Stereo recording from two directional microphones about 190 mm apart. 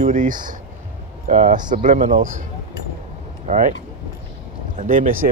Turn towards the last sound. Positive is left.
turn(degrees=-45)  # may be behind; listen again after turning